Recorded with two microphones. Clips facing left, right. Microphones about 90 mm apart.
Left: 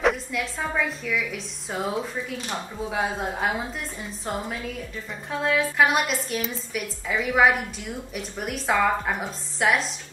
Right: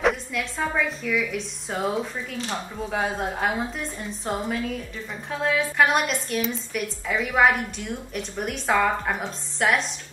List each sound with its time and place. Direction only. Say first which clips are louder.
0.0 s a woman's voice: even; centre (ahead or behind)